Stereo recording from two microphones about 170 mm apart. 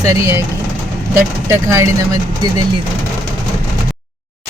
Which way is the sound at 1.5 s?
20° right (ahead or behind).